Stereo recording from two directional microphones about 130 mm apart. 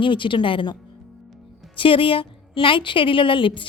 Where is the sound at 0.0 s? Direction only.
40° left (ahead or behind).